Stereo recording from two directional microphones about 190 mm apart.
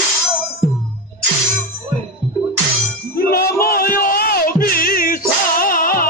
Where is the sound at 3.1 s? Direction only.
50° left (ahead or behind).